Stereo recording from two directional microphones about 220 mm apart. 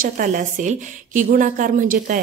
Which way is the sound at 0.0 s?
35° right (ahead or behind).